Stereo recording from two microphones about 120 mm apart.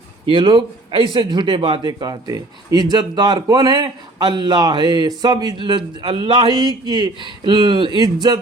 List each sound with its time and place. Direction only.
0.3 s a man's voice: 40° right (ahead or behind)